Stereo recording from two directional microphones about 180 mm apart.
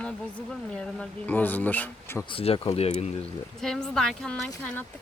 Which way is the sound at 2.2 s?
30° left (ahead or behind).